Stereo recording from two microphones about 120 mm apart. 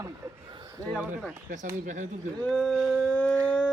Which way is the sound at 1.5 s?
90° right.